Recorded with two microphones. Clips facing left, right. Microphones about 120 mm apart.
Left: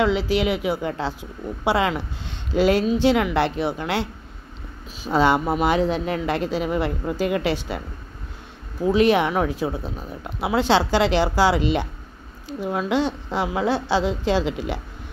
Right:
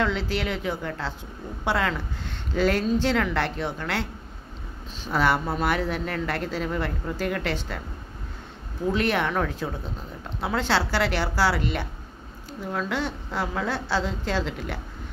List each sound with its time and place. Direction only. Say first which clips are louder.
0.0 s speech: left 6 dB; 15° left (ahead or behind)
8.8 s speech: left 7 dB; 15° left (ahead or behind)